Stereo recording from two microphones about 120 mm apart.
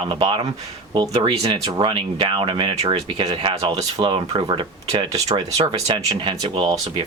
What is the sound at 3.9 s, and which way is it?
Speech, 45° right (ahead or behind).